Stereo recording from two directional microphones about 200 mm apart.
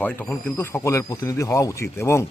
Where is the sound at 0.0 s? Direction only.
10° left (ahead or behind).